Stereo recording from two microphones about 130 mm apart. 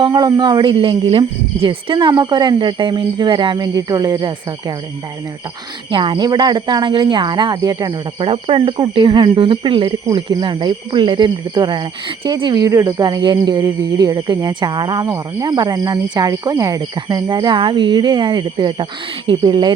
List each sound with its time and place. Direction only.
0.0 s speech: 30° right (ahead or behind)
5.9 s speech: 40° right (ahead or behind)
8.3 s speech: 45° right (ahead or behind)